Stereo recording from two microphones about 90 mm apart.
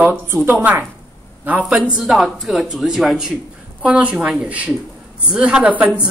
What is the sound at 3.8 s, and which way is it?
A man's voice, 15° right (ahead or behind).